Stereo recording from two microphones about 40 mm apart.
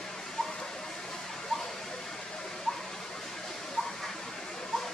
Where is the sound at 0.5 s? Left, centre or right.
Centre.